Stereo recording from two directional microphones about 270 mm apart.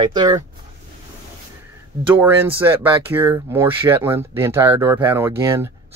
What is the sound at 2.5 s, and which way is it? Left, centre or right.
Speech, centre.